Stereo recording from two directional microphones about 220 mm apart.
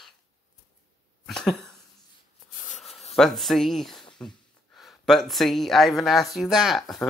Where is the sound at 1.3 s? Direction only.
Centre (ahead or behind).